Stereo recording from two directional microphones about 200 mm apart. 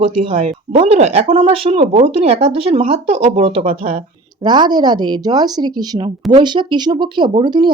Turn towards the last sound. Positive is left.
turn(degrees=-20)  # may be behind; listen again after turning